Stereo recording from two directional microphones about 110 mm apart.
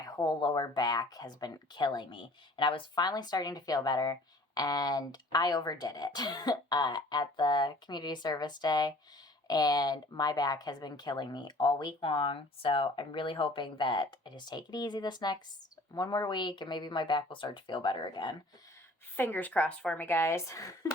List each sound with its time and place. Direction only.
0.0 s speech: 35° left (ahead or behind)
19.1 s a woman's voice: 20° left (ahead or behind)
20.0 s a woman's voice: 20° left (ahead or behind)